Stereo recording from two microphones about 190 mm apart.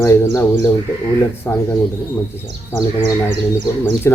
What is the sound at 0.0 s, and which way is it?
Speech, 15° left (ahead or behind).